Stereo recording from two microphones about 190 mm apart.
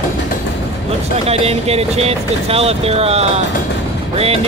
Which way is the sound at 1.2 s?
30° right (ahead or behind).